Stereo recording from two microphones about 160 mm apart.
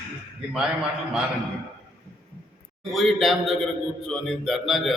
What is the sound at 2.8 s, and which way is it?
A man's voice, centre (ahead or behind).